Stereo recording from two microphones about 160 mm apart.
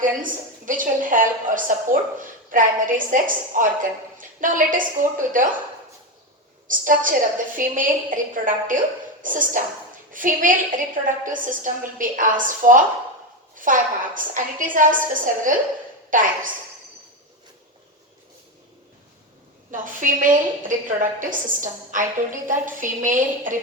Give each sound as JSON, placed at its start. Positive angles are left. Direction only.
{"t": 0.0, "sound": "a woman's voice", "side_deg": -55}
{"t": 6.7, "sound": "a woman's voice", "side_deg": -55}
{"t": 19.7, "sound": "a woman's voice", "side_deg": -55}